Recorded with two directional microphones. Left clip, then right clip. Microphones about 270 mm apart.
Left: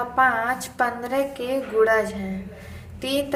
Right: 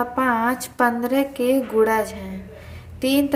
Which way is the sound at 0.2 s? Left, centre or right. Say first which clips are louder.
Left 2 dB; centre.